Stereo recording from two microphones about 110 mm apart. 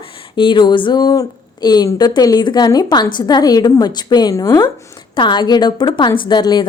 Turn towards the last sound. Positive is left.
turn(degrees=40)  # may be behind; listen again after turning